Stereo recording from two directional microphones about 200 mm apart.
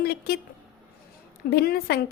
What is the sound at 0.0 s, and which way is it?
Speech, 50° left (ahead or behind).